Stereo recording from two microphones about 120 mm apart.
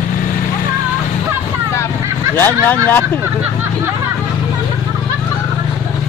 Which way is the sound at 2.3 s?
15° left (ahead or behind).